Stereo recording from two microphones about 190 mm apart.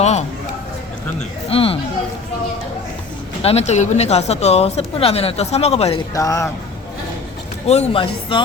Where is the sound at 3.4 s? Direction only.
35° left (ahead or behind).